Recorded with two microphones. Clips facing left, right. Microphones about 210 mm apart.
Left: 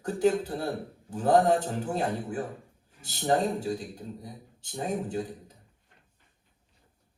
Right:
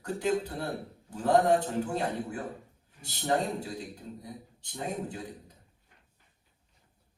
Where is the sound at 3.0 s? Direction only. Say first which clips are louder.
Left 3 dB; 40° left (ahead or behind).